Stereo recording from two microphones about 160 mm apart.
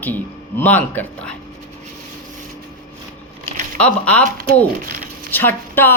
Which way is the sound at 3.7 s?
10° left (ahead or behind).